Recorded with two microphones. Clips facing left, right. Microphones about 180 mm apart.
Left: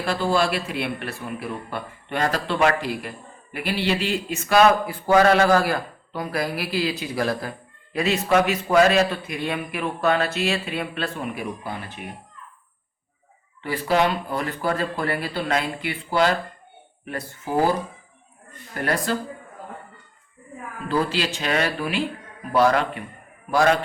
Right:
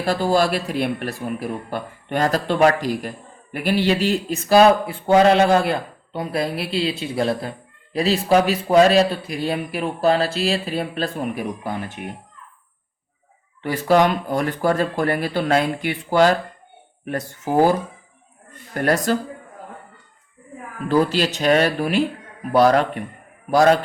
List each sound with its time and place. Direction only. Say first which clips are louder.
0.0 s speech: right 3 dB; 40° right (ahead or behind)
13.6 s speech: right 5 dB; 45° right (ahead or behind)
18.7 s speech: right 5 dB; 45° right (ahead or behind)
20.9 s speech: right 5 dB; 40° right (ahead or behind)